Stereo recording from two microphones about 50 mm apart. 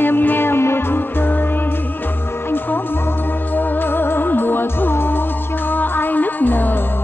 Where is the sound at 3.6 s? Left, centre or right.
Left.